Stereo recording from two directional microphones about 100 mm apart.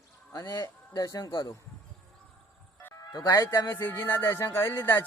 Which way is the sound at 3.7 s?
25° left (ahead or behind).